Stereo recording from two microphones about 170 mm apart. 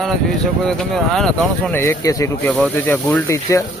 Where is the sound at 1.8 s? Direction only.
20° left (ahead or behind).